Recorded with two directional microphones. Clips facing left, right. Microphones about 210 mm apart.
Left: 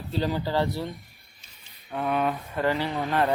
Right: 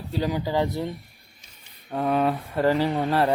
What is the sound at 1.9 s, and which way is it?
Speech, 35° right (ahead or behind).